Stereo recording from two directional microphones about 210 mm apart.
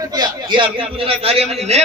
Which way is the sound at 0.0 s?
20° right (ahead or behind).